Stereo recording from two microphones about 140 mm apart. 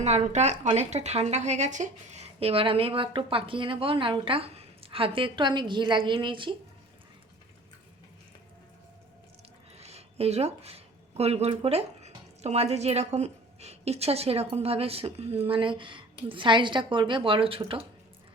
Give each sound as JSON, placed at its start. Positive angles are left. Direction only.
{"t": 0.0, "sound": "a woman's voice", "side_deg": -55}
{"t": 9.7, "sound": "a woman's voice", "side_deg": -50}